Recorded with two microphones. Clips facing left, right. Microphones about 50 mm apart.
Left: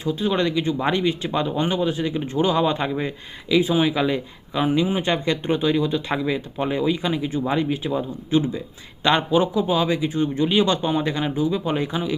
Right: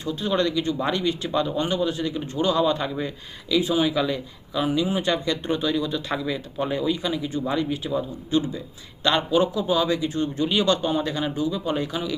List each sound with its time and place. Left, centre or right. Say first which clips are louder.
0.0 s speech: left 2 dB; centre